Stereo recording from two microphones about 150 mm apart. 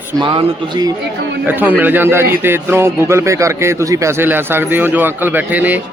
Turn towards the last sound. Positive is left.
turn(degrees=-10)  # may be behind; listen again after turning